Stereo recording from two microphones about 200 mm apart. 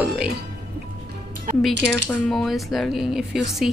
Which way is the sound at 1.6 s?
Centre (ahead or behind).